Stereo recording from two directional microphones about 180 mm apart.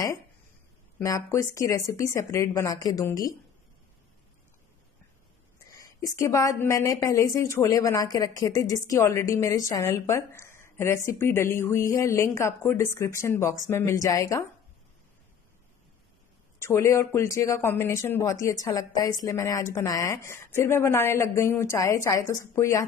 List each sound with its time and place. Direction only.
0.9 s a woman's voice: 15° left (ahead or behind)
5.8 s a woman's voice: 15° left (ahead or behind)
16.5 s speech: 15° left (ahead or behind)